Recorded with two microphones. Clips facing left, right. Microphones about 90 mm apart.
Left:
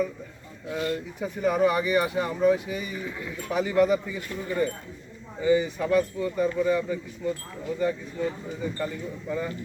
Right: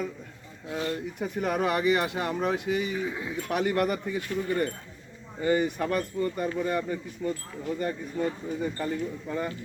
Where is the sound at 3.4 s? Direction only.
70° right (ahead or behind).